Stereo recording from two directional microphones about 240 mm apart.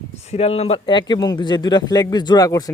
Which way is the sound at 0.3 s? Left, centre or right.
Left.